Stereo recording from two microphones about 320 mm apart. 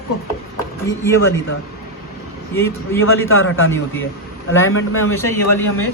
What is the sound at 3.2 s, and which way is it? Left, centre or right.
A man's voice, left.